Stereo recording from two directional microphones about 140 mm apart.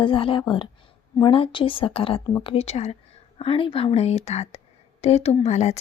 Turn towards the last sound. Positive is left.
turn(degrees=50)  # may be behind; listen again after turning